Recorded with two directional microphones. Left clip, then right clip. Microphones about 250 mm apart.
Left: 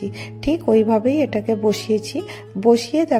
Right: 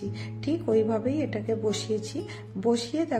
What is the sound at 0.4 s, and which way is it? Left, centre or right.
Speech, left.